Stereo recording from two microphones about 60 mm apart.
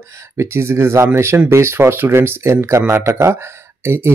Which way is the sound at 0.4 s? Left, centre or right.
Right.